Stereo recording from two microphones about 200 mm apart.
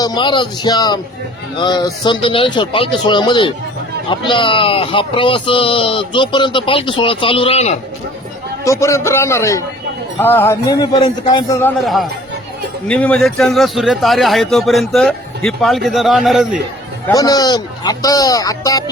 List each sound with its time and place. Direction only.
0.0 s speech: 20° left (ahead or behind)
8.6 s a man's voice: 15° left (ahead or behind)
11.8 s a man's voice: centre (ahead or behind)
17.1 s a man's voice: 15° left (ahead or behind)